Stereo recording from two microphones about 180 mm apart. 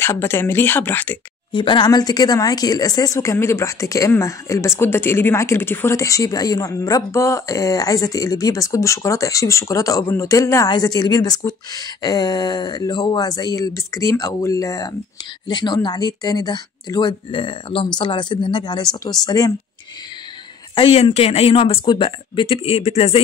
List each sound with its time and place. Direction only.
0.0 s speech: 15° left (ahead or behind)
1.5 s speech: 25° left (ahead or behind)
20.7 s speech: 35° left (ahead or behind)